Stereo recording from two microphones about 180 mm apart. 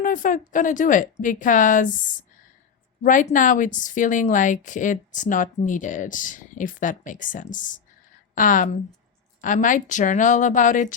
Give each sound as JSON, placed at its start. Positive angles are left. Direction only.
{"t": 0.0, "sound": "a woman's voice", "side_deg": 45}